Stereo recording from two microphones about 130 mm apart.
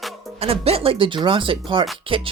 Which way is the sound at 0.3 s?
50° right (ahead or behind).